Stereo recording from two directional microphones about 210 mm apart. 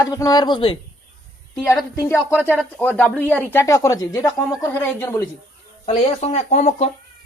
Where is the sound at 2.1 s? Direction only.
10° left (ahead or behind).